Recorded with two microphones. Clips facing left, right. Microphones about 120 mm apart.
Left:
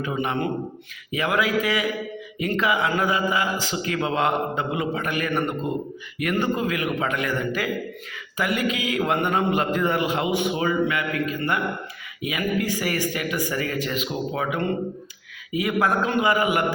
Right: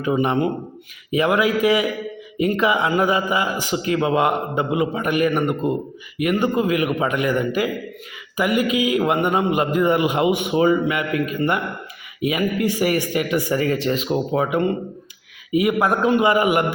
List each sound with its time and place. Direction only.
0.0 s a man's voice: 20° right (ahead or behind)
5.3 s a man's voice: 5° right (ahead or behind); by 16.7 s 20° right (ahead or behind)